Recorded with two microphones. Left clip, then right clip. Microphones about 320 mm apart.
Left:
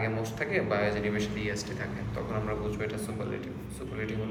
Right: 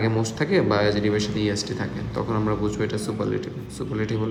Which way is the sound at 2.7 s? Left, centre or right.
Centre.